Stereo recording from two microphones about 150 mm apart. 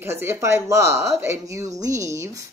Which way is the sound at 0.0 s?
15° right (ahead or behind).